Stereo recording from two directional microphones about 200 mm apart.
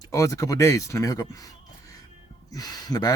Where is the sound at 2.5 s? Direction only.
20° left (ahead or behind).